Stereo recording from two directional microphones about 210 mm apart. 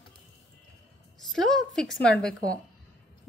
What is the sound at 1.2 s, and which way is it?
A woman's voice, centre (ahead or behind).